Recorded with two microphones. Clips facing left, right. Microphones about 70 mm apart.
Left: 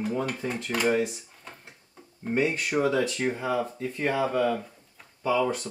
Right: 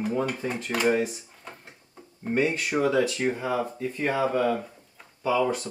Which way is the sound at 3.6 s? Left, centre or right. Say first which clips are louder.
Even; centre.